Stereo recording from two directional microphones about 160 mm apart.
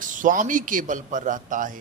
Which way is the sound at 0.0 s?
55° right (ahead or behind).